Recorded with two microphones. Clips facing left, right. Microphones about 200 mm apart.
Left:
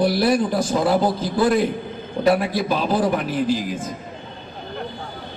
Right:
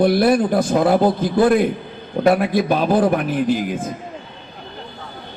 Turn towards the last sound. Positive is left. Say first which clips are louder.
# right 2 dB
turn(degrees=-55)  # may be behind; listen again after turning